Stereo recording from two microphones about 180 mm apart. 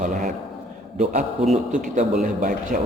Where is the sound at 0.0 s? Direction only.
45° right (ahead or behind).